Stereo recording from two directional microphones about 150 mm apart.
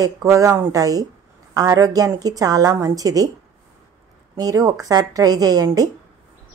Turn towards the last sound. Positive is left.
turn(degrees=-25)  # may be behind; listen again after turning